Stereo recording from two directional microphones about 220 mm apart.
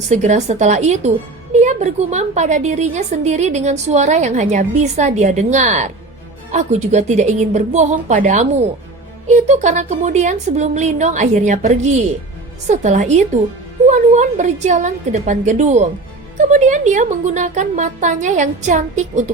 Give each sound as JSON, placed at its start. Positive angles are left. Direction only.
{"t": 0.1, "sound": "a woman's voice", "side_deg": -30}